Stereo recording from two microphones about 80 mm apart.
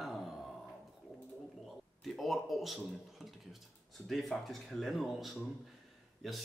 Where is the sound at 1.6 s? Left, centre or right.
Centre.